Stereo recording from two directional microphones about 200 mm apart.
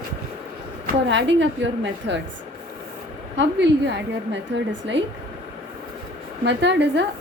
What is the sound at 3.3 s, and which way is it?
A woman's voice, 60° right (ahead or behind).